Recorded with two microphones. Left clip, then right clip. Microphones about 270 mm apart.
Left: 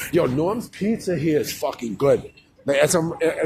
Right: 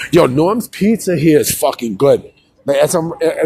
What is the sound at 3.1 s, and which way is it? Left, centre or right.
Speech, right.